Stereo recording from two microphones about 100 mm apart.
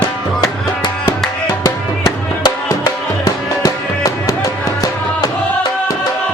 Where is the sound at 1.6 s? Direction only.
35° left (ahead or behind).